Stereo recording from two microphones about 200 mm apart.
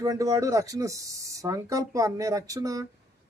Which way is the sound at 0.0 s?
15° right (ahead or behind).